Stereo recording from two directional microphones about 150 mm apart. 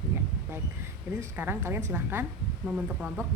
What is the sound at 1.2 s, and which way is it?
A woman's voice, 15° right (ahead or behind).